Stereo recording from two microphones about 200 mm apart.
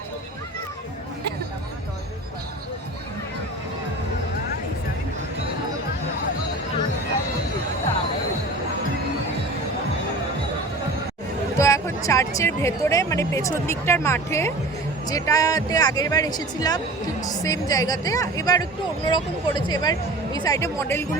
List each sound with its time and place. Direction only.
11.5 s speech: 15° left (ahead or behind)